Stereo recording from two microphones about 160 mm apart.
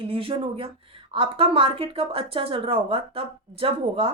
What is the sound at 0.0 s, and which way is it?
Speech, 35° right (ahead or behind).